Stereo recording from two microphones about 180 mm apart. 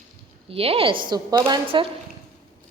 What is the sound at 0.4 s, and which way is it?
A woman's voice, 30° right (ahead or behind).